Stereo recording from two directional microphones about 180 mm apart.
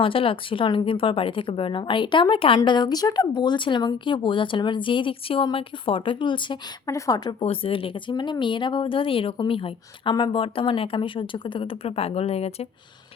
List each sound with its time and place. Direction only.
0.0 s speech: 30° left (ahead or behind)
7.4 s speech: 30° left (ahead or behind)